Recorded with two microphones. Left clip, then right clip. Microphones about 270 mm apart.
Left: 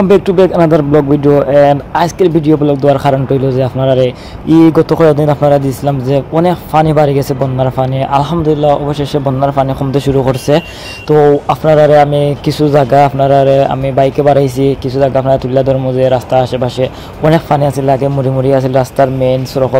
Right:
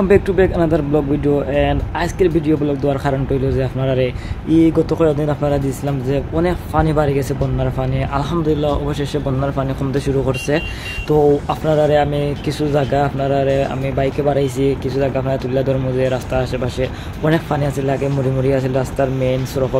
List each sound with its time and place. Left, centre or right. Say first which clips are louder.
0.1 s speech: left 6 dB; centre